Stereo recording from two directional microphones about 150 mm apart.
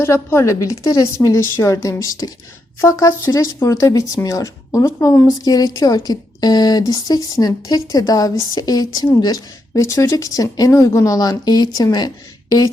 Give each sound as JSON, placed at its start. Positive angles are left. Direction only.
{"t": 0.0, "sound": "a woman's voice", "side_deg": 15}